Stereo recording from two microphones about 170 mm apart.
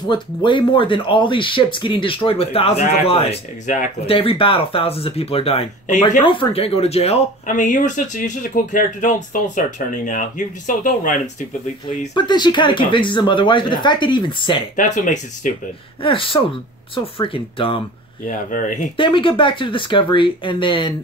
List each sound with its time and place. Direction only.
0.1 s speech: 30° left (ahead or behind); by 4.1 s 45° left (ahead or behind)
4.1 s speech: 35° left (ahead or behind)
7.4 s speech: 50° left (ahead or behind)
12.1 s speech: 25° left (ahead or behind)
14.8 s speech: 50° left (ahead or behind)
16.0 s speech: 30° left (ahead or behind)
18.2 s speech: 50° left (ahead or behind)
18.9 s speech: 30° left (ahead or behind)